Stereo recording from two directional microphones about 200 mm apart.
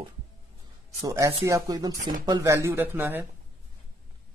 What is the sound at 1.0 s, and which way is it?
Speech, 15° right (ahead or behind).